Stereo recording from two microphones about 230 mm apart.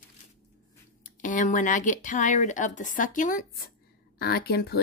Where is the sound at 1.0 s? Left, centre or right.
Left.